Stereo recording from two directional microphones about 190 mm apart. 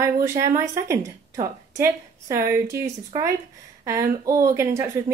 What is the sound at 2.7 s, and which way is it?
A woman's voice, 15° right (ahead or behind).